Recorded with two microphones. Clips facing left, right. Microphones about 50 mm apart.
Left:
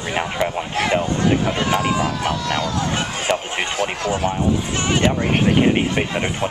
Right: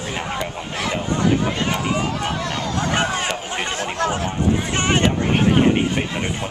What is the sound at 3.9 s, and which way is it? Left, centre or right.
Speech, right.